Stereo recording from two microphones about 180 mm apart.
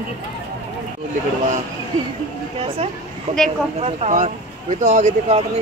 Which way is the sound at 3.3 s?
40° right (ahead or behind).